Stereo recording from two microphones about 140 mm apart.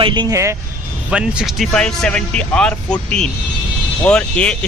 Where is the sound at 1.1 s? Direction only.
5° right (ahead or behind).